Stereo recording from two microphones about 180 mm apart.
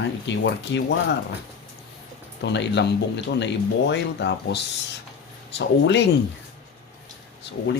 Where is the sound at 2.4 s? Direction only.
75° left (ahead or behind).